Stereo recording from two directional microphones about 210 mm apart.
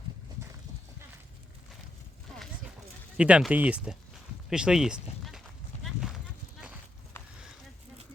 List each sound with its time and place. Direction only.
3.2 s speech: 5° right (ahead or behind)
4.4 s a sound: 5° right (ahead or behind)
5.8 s clip-clop: centre (ahead or behind)